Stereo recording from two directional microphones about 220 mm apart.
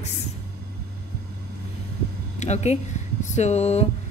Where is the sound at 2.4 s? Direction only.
30° left (ahead or behind).